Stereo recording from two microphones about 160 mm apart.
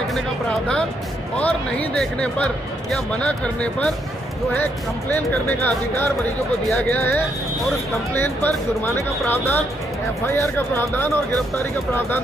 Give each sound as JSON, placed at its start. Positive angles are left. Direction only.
{"t": 0.1, "sound": "speech", "side_deg": 5}
{"t": 5.1, "sound": "speech", "side_deg": 15}